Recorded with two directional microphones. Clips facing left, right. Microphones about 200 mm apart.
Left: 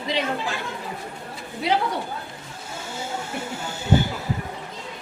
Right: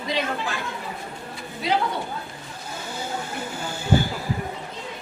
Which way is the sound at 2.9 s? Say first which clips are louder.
Even; 25° left (ahead or behind).